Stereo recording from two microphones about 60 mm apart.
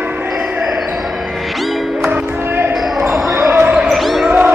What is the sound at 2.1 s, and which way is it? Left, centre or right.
Music, right.